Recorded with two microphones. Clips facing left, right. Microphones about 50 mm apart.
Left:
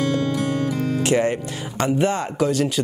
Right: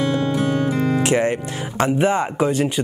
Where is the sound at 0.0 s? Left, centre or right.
Right.